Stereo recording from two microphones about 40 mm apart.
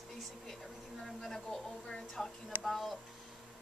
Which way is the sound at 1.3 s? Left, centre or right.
Centre.